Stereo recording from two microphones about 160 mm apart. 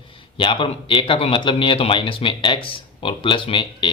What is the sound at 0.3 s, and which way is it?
Speech, 35° left (ahead or behind).